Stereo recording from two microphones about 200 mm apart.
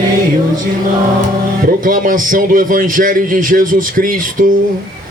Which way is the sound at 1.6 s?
45° right (ahead or behind).